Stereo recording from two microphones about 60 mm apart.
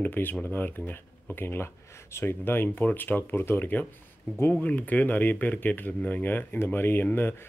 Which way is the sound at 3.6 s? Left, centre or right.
Left.